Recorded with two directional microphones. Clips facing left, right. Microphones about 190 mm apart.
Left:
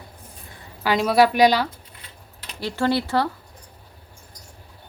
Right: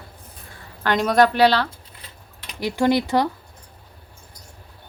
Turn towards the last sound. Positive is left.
turn(degrees=-15)  # may be behind; listen again after turning